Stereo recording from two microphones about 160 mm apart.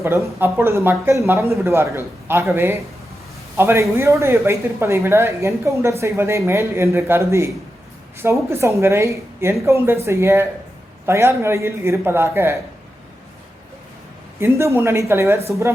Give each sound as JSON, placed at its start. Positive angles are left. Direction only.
{"t": 0.0, "sound": "speech", "side_deg": -15}
{"t": 14.3, "sound": "speech", "side_deg": -15}